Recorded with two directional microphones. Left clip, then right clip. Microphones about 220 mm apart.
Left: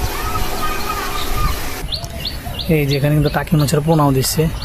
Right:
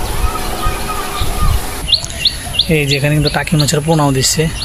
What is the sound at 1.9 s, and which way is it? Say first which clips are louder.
Chirp: right 11 dB; 50° left (ahead or behind).